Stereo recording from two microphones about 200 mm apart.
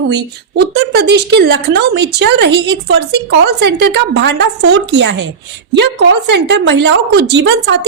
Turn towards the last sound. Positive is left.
turn(degrees=-60)  # may be behind; listen again after turning